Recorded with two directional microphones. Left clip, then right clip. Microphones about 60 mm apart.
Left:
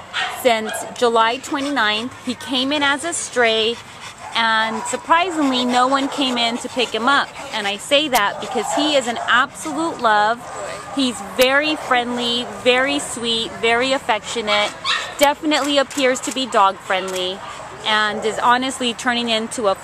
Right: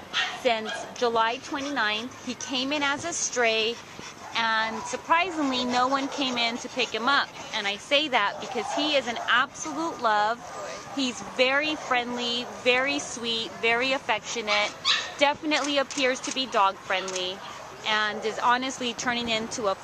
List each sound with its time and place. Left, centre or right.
0.4 s speech: centre
2.2 s speech: right
3.1 s speech: centre
6.8 s speech: centre
9.8 s speech: centre
16.0 s speech: centre
16.5 s speech: centre; by 19.8 s right